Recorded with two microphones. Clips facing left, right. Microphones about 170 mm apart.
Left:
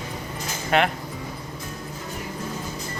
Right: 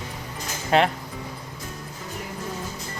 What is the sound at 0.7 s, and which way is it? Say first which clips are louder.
Speech: right 1 dB; 30° right (ahead or behind).